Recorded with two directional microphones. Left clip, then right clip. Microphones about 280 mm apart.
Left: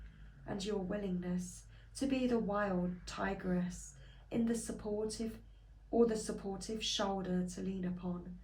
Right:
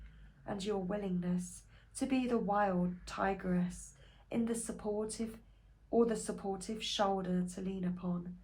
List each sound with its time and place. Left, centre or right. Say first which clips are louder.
0.4 s speech: right 2 dB; right